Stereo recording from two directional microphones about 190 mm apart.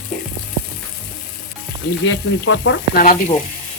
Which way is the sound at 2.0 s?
85° left.